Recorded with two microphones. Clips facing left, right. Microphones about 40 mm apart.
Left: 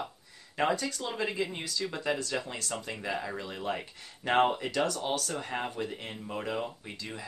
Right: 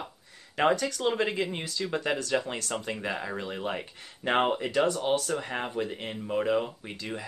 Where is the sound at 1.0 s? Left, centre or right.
Right.